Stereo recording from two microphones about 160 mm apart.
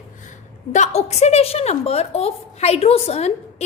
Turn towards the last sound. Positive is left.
turn(degrees=40)  # may be behind; listen again after turning